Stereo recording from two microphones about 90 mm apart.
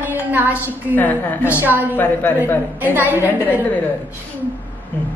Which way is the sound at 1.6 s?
20° right (ahead or behind).